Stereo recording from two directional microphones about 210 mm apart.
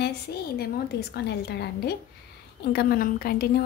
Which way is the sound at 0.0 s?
50° left (ahead or behind).